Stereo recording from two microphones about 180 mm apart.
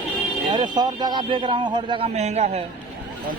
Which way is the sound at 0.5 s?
25° right (ahead or behind).